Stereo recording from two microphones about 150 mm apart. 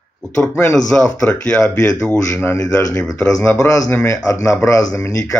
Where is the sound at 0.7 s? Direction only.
5° left (ahead or behind).